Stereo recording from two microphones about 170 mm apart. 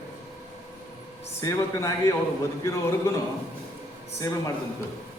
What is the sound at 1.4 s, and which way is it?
Speech, 20° left (ahead or behind).